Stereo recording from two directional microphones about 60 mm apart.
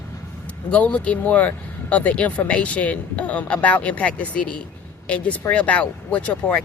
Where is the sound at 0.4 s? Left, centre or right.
Left.